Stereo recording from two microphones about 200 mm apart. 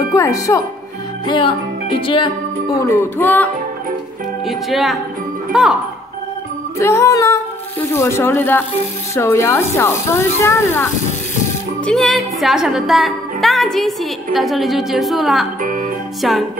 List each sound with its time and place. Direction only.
0.1 s speech: 15° left (ahead or behind)
2.9 s speech: 10° left (ahead or behind)
4.5 s a woman's voice: centre (ahead or behind)
6.8 s speech: 15° left (ahead or behind)
11.8 s a woman's voice: centre (ahead or behind)